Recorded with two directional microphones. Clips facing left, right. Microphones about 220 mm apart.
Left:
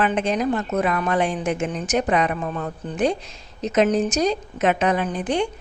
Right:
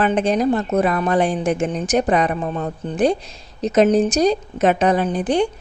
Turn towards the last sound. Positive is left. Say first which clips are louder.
# right 4 dB
turn(degrees=-35)  # may be behind; listen again after turning